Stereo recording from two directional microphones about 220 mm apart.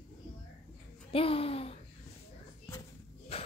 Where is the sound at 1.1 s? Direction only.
25° left (ahead or behind).